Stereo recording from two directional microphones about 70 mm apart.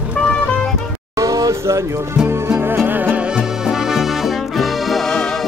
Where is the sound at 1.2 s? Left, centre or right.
Right.